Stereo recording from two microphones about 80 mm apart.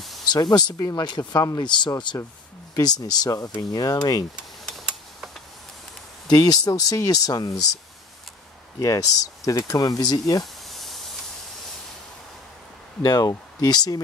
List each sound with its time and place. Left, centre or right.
0.3 s speech: left
2.7 s speech: left
6.2 s speech: left
8.7 s speech: left
10.4 s snake: centre
13.0 s speech: left